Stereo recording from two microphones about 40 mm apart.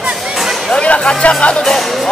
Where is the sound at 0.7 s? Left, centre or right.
Left.